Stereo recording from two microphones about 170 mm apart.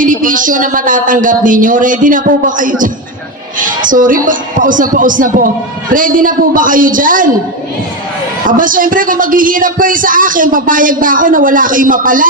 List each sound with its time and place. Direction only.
0.0 s a man's voice: 50° right (ahead or behind)
8.4 s a man's voice: 50° right (ahead or behind)